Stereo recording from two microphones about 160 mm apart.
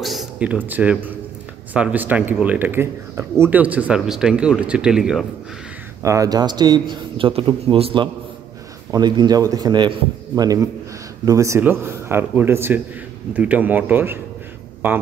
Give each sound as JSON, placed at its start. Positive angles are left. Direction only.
{"t": 0.0, "sound": "a sound", "side_deg": 0}
{"t": 0.7, "sound": "speech", "side_deg": -10}
{"t": 6.0, "sound": "a man's voice", "side_deg": -20}